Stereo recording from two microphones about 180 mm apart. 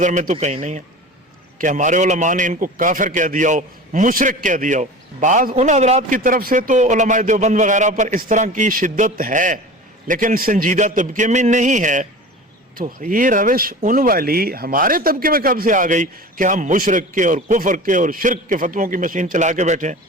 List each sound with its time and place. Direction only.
0.0 s a man's voice: 45° right (ahead or behind)